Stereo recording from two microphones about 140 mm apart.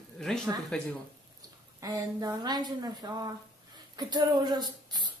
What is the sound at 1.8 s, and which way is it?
Speech, 25° right (ahead or behind).